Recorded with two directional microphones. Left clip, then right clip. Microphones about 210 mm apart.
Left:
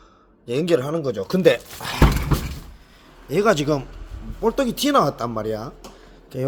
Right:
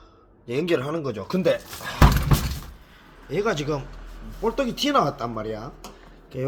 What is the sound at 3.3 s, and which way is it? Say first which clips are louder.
Speech: left 6 dB; 35° left (ahead or behind).